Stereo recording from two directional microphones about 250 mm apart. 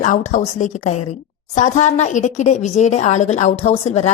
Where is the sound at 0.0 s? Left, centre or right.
Left.